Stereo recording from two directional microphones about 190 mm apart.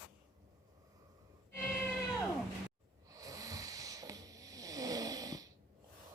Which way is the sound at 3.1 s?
20° right (ahead or behind).